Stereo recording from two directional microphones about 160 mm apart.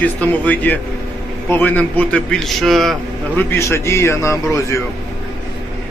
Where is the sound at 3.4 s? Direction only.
15° left (ahead or behind).